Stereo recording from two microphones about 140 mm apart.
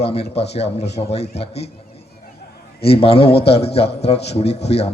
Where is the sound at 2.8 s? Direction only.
45° left (ahead or behind).